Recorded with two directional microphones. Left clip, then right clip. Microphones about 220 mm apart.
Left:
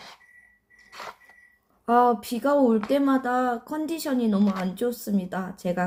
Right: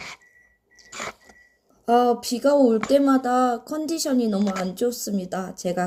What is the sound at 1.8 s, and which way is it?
Speech, 10° right (ahead or behind).